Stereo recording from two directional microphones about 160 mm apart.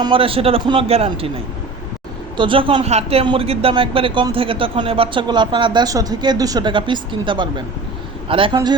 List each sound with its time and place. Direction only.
0.0 s speech: 35° right (ahead or behind)
2.4 s speech: 35° right (ahead or behind)